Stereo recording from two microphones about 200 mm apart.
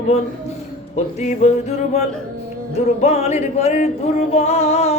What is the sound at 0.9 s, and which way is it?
Music, 35° left (ahead or behind).